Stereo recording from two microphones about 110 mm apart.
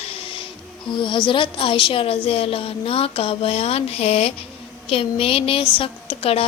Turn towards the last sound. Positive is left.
turn(degrees=60)  # may be behind; listen again after turning